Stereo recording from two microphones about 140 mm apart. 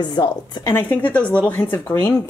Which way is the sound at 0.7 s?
15° left (ahead or behind).